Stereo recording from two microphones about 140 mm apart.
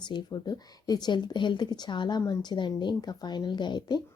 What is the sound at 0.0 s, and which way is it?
Speech, 35° left (ahead or behind).